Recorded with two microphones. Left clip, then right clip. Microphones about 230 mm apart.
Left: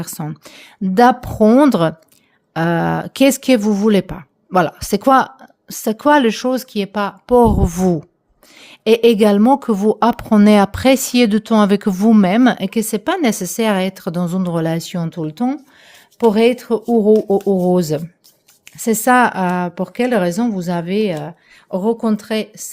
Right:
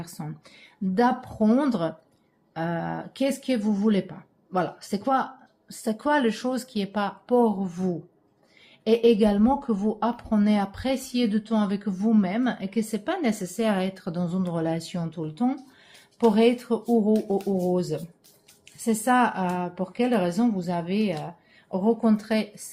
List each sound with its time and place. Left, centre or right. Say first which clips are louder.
0.0 s a woman's voice: left 11 dB; left